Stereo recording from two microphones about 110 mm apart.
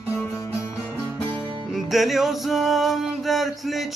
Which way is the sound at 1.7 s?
Centre (ahead or behind).